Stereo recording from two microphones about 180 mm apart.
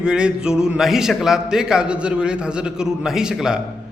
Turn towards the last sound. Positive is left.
turn(degrees=-5)  # may be behind; listen again after turning